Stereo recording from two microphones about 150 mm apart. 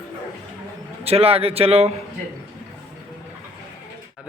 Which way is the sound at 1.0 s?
40° right (ahead or behind).